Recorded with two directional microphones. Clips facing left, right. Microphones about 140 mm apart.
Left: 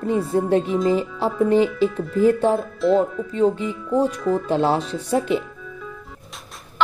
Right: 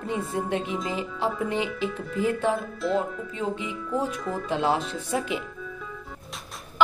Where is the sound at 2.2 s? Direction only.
35° left (ahead or behind).